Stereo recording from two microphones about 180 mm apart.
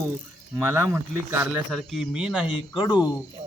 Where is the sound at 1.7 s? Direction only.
Centre (ahead or behind).